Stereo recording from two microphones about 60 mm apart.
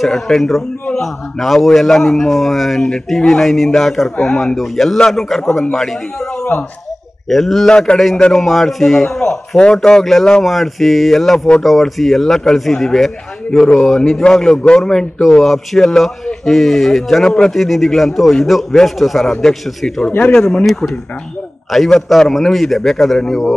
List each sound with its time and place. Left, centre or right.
0.0 s a man's voice: centre
7.2 s a man's voice: centre
7.7 s speech: centre
8.2 s a man's voice: centre
20.6 s a man's voice: centre